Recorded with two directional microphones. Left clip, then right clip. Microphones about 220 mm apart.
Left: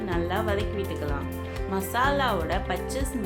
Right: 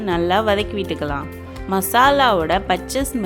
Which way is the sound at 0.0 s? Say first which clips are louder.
Right 10 dB; 40° right (ahead or behind).